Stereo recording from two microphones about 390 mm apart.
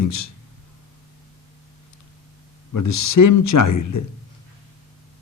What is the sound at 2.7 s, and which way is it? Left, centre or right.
Speech, left.